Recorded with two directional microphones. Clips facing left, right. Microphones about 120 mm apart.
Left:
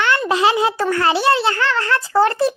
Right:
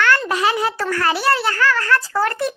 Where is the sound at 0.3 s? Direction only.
25° left (ahead or behind).